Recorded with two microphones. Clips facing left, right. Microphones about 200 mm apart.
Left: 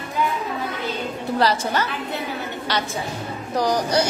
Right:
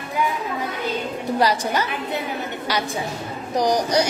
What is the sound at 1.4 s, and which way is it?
A woman's voice, 15° right (ahead or behind).